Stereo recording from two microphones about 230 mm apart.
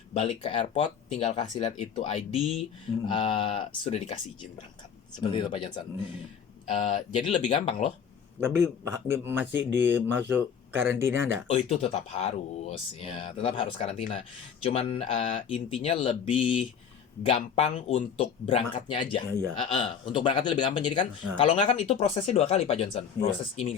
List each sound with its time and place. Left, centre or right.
0.1 s speech: left
5.2 s speech: left
6.8 s speech: left
8.4 s speech: centre
11.4 s speech: left